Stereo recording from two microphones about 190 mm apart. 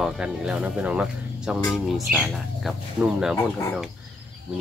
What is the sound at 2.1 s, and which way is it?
Speech, 45° right (ahead or behind).